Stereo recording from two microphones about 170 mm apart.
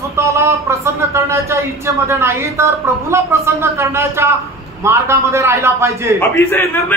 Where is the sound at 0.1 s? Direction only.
15° right (ahead or behind).